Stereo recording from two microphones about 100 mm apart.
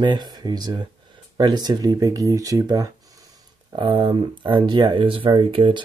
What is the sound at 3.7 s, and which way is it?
Speech, 55° right (ahead or behind).